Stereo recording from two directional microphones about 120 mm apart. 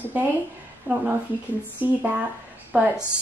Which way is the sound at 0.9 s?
10° right (ahead or behind).